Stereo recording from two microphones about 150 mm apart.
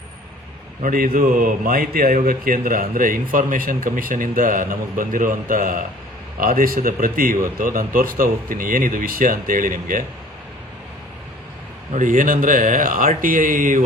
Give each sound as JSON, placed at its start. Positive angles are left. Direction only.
{"t": 0.8, "sound": "a man's voice", "side_deg": -70}
{"t": 11.9, "sound": "a man's voice", "side_deg": -60}